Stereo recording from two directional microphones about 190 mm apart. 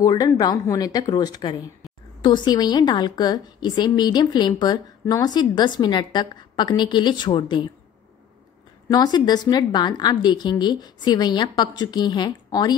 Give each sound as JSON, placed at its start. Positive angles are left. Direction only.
{"t": 0.0, "sound": "a woman's voice", "side_deg": 20}
{"t": 8.8, "sound": "a woman's voice", "side_deg": 20}